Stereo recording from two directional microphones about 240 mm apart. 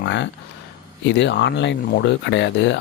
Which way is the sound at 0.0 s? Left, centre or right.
Left.